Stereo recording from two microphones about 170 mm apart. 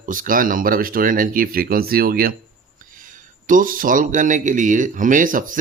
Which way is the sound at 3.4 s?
55° right (ahead or behind).